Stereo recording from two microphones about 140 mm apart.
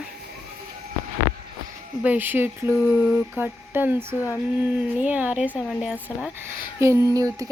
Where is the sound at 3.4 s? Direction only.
15° right (ahead or behind).